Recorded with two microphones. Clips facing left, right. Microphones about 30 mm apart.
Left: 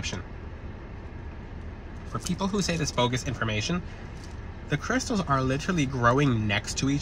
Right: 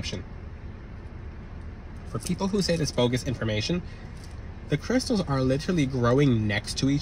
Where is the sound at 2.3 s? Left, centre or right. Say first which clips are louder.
Right 2 dB; right.